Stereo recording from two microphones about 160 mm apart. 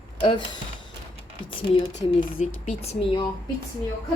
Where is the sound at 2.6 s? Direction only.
40° left (ahead or behind).